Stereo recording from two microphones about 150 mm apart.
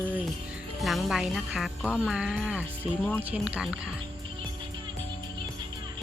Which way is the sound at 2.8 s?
10° left (ahead or behind).